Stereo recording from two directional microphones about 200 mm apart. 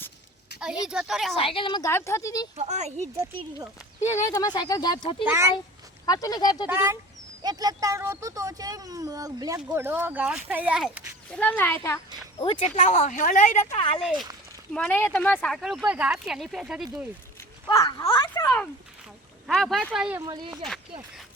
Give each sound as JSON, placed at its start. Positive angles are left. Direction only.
{"t": 0.9, "sound": "speech", "side_deg": -5}
{"t": 1.4, "sound": "speech", "side_deg": 25}
{"t": 1.9, "sound": "speech", "side_deg": 10}
{"t": 2.6, "sound": "speech", "side_deg": -35}
{"t": 4.0, "sound": "speech", "side_deg": 15}
{"t": 5.2, "sound": "speech", "side_deg": -15}
{"t": 6.1, "sound": "speech", "side_deg": 20}
{"t": 6.7, "sound": "speech", "side_deg": -10}
{"t": 11.3, "sound": "speech", "side_deg": 10}
{"t": 12.4, "sound": "a woman's voice", "side_deg": 30}
{"t": 14.0, "sound": "speech", "side_deg": -5}
{"t": 17.7, "sound": "speech", "side_deg": 20}
{"t": 19.5, "sound": "speech", "side_deg": 0}
{"t": 20.2, "sound": "speech", "side_deg": -20}